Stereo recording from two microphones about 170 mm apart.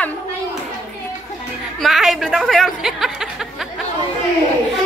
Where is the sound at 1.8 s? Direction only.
Centre (ahead or behind).